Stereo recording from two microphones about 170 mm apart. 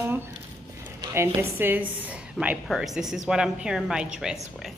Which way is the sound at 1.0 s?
15° right (ahead or behind).